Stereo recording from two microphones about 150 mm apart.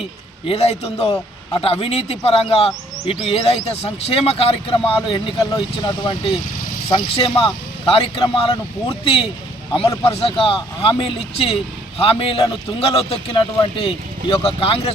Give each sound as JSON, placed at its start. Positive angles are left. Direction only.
{"t": 0.4, "sound": "speech", "side_deg": 40}